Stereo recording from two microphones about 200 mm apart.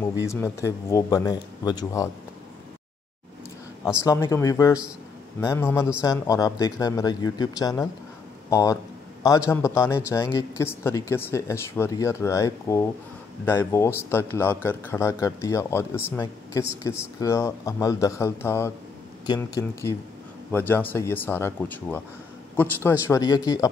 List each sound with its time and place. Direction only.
0.2 s a man's voice: 15° left (ahead or behind)
4.0 s a man's voice: 15° left (ahead or behind)